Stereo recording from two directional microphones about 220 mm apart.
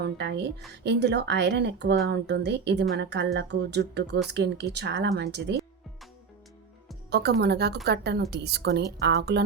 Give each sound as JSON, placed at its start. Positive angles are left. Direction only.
{"t": 0.0, "sound": "a woman's voice", "side_deg": -50}
{"t": 7.1, "sound": "a woman's voice", "side_deg": -50}